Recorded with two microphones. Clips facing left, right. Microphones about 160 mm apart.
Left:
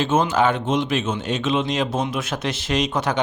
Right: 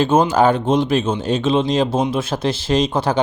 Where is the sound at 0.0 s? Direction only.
35° right (ahead or behind).